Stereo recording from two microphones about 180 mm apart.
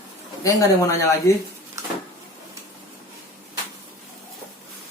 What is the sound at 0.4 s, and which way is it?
Speech, 15° left (ahead or behind).